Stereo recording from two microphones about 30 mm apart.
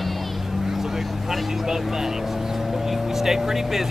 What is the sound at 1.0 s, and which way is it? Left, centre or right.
Vehicle, centre.